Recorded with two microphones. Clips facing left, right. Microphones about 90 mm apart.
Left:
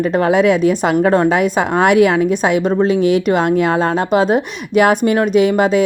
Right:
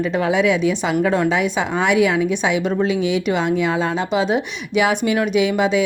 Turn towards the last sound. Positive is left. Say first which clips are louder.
# left 5 dB
turn(degrees=45)  # may be behind; listen again after turning